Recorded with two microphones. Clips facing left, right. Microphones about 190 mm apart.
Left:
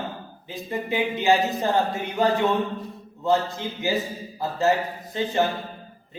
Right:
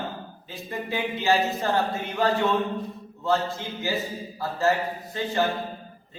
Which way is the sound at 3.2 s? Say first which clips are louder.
Left 2 dB; 20° left (ahead or behind).